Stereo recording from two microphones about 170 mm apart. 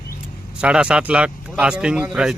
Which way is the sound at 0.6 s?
5° right (ahead or behind).